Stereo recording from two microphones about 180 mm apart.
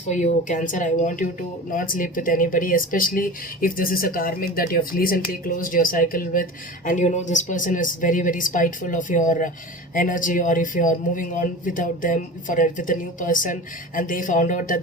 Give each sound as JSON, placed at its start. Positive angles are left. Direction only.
{"t": 0.1, "sound": "speech", "side_deg": 45}